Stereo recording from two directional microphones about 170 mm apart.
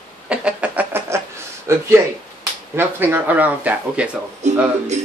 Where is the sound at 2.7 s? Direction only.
10° right (ahead or behind).